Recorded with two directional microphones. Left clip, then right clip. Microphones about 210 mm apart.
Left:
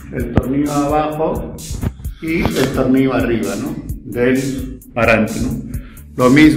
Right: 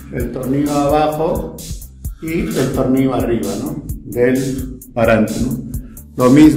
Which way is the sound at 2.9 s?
Centre (ahead or behind).